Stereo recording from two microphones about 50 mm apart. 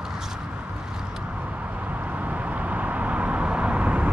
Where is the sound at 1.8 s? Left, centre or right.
Right.